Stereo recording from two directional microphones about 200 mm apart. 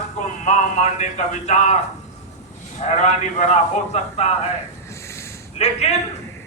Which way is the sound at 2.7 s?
35° left (ahead or behind).